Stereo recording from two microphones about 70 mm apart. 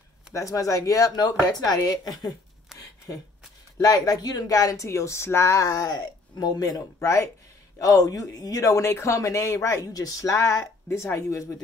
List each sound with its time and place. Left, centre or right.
0.3 s speech: left
2.7 s a sound: centre
3.8 s speech: left
5.7 s speech: left
7.8 s speech: left